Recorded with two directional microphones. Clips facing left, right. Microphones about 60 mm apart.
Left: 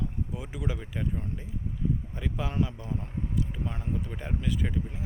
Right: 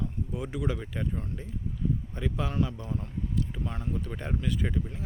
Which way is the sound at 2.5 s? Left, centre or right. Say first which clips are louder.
Even; centre.